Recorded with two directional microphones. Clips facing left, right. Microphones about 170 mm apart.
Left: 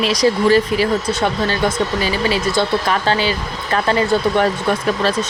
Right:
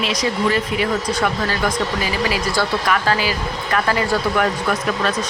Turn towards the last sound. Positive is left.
turn(degrees=30)  # may be behind; listen again after turning